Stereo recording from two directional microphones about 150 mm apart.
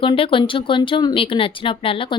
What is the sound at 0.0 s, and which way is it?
Speech, 35° left (ahead or behind).